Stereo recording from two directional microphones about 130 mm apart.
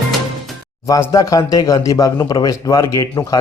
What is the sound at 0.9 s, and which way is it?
A man's voice, 25° left (ahead or behind).